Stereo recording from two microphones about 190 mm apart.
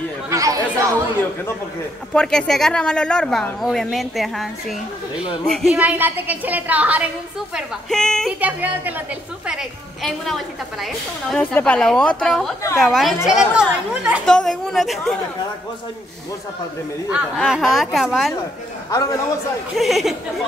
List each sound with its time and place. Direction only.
0.3 s chatter: 15° right (ahead or behind)
2.1 s a woman's voice: 5° left (ahead or behind)
8.4 s a woman's voice: 10° right (ahead or behind)
17.4 s a woman's voice: centre (ahead or behind)
18.9 s a man's voice: 15° left (ahead or behind)
19.7 s a woman's voice: centre (ahead or behind)